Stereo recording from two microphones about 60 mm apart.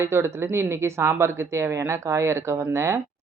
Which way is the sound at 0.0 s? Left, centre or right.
Right.